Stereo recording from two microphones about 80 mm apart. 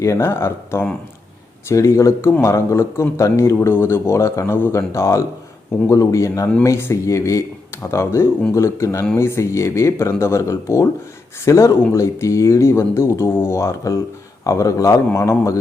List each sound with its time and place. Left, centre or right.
0.0 s speech: left